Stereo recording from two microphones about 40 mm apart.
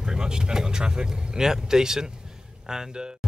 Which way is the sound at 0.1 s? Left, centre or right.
Centre.